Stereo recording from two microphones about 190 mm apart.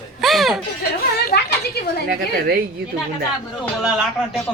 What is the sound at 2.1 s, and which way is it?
Speech, 50° right (ahead or behind).